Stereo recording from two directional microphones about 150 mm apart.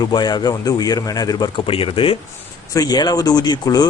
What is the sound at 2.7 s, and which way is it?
Speech, 25° left (ahead or behind).